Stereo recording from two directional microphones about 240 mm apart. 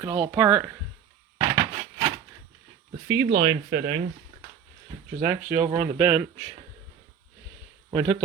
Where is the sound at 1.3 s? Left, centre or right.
Right.